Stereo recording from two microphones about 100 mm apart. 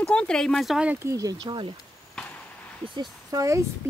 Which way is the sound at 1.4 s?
55° right (ahead or behind).